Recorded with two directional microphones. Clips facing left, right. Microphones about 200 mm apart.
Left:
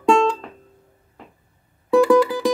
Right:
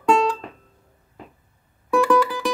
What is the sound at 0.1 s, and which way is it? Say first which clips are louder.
Music: left 2 dB; 25° left (ahead or behind).